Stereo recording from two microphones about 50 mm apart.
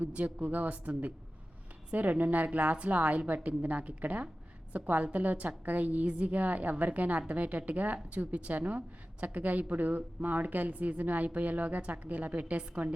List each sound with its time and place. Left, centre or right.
0.1 s a woman's voice: right
0.3 s a woman's voice: right